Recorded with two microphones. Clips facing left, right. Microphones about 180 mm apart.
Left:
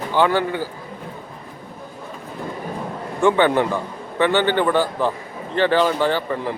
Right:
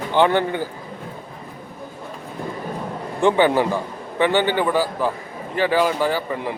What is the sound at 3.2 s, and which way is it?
Speech, 15° right (ahead or behind).